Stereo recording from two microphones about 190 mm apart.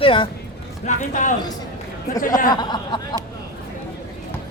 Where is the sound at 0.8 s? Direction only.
40° left (ahead or behind).